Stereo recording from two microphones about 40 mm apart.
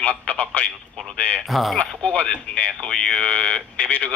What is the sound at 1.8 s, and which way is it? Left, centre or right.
Speech, left.